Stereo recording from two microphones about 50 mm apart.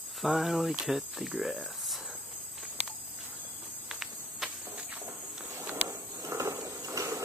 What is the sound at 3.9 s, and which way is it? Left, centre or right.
Cricket, centre.